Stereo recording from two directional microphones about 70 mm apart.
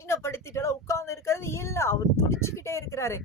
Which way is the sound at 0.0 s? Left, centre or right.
Left.